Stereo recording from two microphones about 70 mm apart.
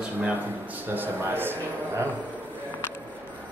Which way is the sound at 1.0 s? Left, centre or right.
Right.